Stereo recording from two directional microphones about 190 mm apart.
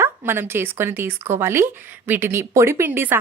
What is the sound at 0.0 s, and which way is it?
Speech, 10° right (ahead or behind).